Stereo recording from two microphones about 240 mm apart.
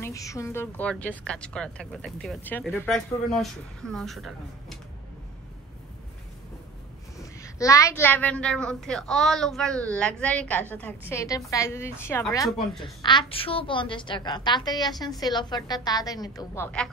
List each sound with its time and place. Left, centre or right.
0.0 s a woman's voice: centre
7.2 s a woman's voice: centre